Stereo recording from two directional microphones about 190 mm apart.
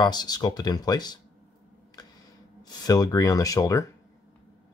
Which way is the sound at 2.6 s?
20° left (ahead or behind).